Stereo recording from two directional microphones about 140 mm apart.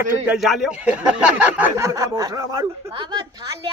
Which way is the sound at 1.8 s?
20° right (ahead or behind).